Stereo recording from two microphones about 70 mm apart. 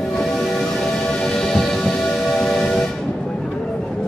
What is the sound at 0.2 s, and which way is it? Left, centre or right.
Music, centre.